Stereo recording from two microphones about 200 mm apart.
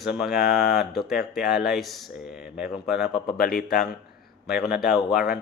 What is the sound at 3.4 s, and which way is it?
Speech, 50° left (ahead or behind).